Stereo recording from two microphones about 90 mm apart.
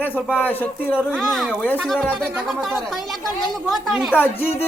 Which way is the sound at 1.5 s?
20° left (ahead or behind).